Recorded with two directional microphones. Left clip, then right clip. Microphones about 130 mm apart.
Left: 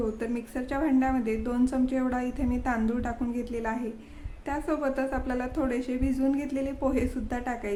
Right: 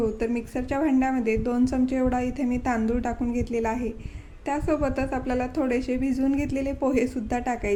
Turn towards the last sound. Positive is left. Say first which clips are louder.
# right 5 dB
turn(degrees=-25)  # may be behind; listen again after turning